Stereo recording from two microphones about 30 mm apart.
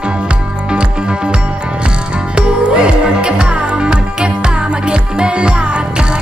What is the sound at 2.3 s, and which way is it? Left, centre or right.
Music, right.